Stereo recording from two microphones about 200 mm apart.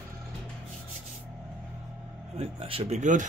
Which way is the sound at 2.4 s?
30° right (ahead or behind).